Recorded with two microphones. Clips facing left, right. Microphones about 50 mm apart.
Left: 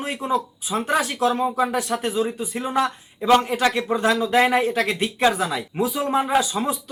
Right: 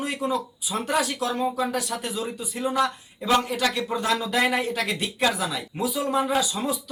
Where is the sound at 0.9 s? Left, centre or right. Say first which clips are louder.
Left 4 dB; left.